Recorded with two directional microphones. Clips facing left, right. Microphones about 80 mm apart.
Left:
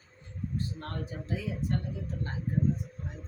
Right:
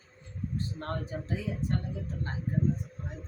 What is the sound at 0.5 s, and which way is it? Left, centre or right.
Speech, right.